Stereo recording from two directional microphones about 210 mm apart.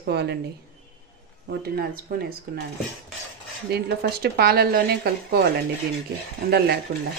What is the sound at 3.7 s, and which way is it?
Speech, 50° right (ahead or behind).